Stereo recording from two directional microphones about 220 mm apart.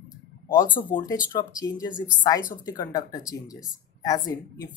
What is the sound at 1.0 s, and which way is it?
Speech, 15° left (ahead or behind).